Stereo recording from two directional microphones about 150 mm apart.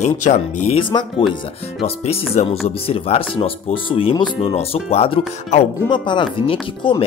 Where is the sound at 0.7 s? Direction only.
35° left (ahead or behind).